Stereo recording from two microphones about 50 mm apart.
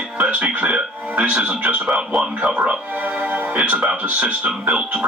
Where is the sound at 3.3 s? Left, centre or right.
Right.